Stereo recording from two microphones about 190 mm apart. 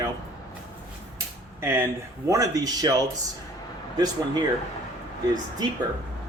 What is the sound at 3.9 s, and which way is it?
Speech, 20° right (ahead or behind).